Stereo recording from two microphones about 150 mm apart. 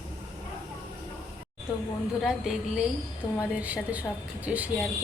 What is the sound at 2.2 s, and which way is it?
A woman's voice, centre (ahead or behind).